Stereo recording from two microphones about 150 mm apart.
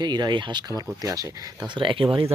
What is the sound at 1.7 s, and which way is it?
Speech, 35° right (ahead or behind).